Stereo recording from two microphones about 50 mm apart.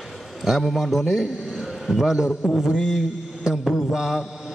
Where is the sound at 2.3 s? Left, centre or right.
Left.